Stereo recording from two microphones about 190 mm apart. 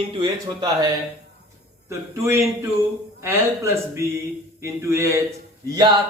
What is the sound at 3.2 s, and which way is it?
A man's voice, 15° right (ahead or behind).